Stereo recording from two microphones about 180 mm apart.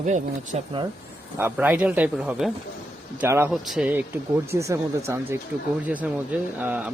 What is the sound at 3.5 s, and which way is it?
Speech, centre (ahead or behind).